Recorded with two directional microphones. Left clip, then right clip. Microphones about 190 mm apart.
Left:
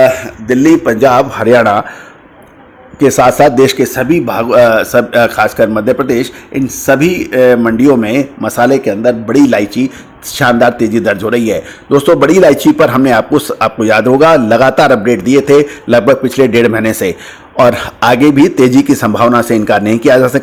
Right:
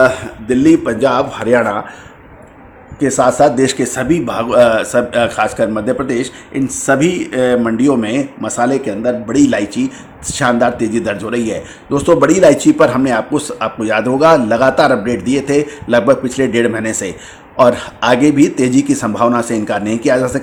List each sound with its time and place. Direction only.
0.4 s a man's voice: 25° left (ahead or behind)
3.0 s speech: 30° left (ahead or behind)
3.8 s a man's voice: 20° left (ahead or behind)